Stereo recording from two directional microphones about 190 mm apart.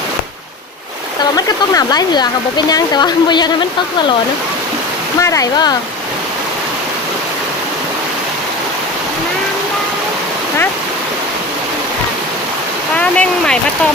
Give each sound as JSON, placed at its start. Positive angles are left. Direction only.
{"t": 1.2, "sound": "speech", "side_deg": 20}
{"t": 5.2, "sound": "speech", "side_deg": 15}
{"t": 13.0, "sound": "speech", "side_deg": 5}